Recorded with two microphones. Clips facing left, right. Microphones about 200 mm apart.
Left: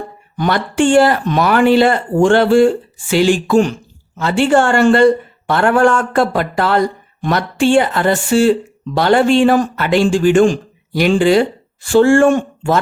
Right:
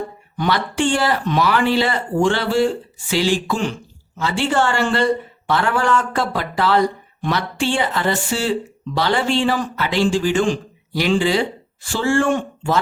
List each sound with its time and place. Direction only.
0.3 s speech: 50° left (ahead or behind)